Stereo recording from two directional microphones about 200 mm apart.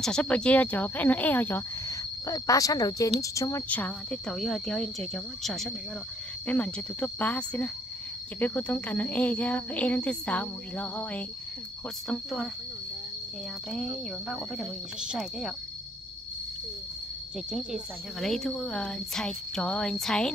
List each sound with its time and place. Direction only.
0.0 s a woman's voice: 5° left (ahead or behind)
13.7 s a woman's voice: centre (ahead or behind)
17.5 s a woman's voice: centre (ahead or behind)